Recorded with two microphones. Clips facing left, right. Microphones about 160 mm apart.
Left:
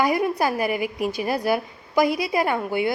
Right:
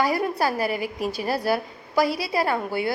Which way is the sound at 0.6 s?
40° right (ahead or behind).